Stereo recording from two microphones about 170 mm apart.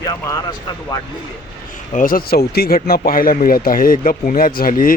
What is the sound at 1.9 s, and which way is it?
Speech, 55° left (ahead or behind).